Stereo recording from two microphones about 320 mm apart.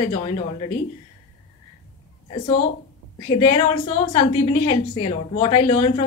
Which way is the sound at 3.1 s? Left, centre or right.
Centre.